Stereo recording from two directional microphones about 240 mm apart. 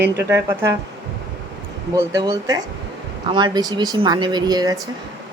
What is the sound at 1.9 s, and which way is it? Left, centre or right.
A woman's voice, centre.